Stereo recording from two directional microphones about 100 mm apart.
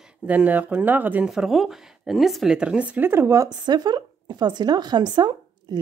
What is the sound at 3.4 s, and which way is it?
A woman's voice, 45° right (ahead or behind).